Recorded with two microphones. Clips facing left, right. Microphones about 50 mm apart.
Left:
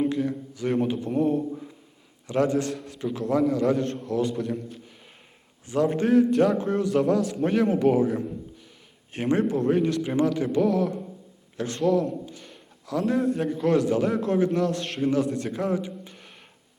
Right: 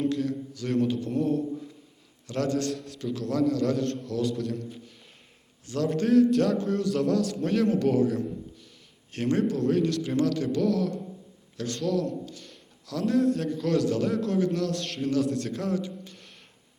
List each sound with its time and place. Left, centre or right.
0.0 s a man's voice: centre
3.0 s a man's voice: left
5.6 s a man's voice: centre